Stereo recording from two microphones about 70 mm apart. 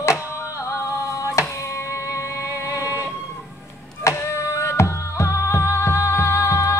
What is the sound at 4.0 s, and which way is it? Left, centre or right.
Music, left.